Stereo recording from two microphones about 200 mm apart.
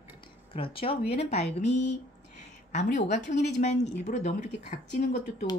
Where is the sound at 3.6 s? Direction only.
35° left (ahead or behind).